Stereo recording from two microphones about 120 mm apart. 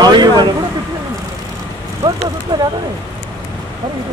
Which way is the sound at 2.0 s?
35° right (ahead or behind).